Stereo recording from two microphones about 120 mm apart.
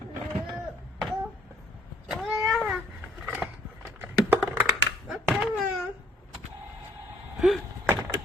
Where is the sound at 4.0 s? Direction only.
15° right (ahead or behind).